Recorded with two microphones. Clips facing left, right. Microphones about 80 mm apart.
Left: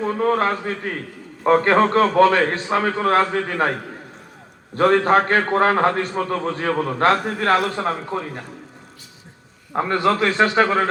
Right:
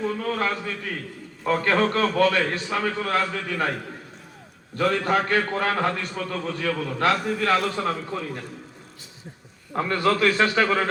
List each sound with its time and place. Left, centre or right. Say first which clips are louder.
0.0 s a man's voice: left 6 dB; left
4.8 s a man's voice: left 7 dB; left
9.7 s a man's voice: left 3 dB; left